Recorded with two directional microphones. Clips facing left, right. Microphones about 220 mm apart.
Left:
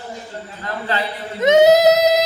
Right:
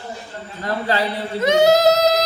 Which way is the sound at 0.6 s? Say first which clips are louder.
Right 3 dB; 35° right (ahead or behind).